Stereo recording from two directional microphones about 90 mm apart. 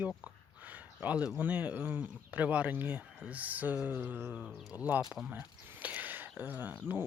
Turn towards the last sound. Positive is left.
turn(degrees=-20)  # may be behind; listen again after turning